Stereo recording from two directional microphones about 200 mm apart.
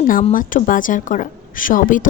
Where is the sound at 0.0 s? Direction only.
45° left (ahead or behind).